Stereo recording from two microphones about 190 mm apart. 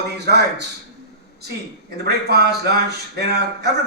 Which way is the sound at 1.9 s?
55° right (ahead or behind).